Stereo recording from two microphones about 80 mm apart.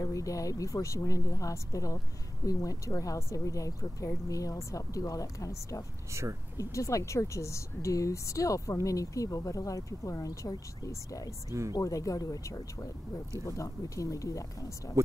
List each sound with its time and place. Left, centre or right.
0.0 s a woman's voice: left
15.0 s speech: right